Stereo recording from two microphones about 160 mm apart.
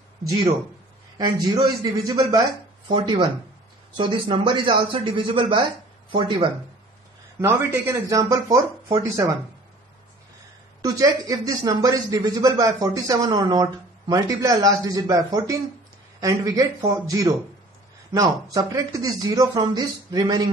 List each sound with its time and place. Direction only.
1.1 s speech: 25° right (ahead or behind)
7.3 s speech: 15° right (ahead or behind)
10.8 s speech: 25° right (ahead or behind)